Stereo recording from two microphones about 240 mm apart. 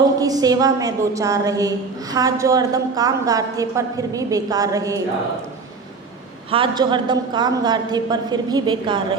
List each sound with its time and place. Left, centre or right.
0.2 s a woman's voice: centre
6.5 s a woman's voice: centre